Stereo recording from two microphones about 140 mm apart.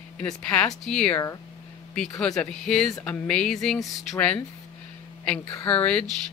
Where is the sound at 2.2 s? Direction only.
5° left (ahead or behind).